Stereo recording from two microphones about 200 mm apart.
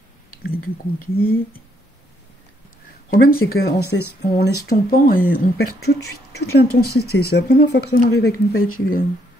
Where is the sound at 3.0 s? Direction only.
45° left (ahead or behind).